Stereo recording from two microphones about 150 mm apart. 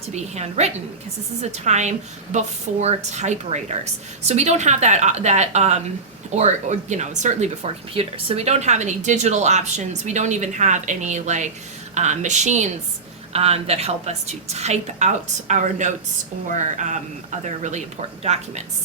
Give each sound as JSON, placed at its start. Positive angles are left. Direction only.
{"t": 0.1, "sound": "speech", "side_deg": -45}